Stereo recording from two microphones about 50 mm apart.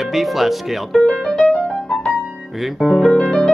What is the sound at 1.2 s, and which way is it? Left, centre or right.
Music, centre.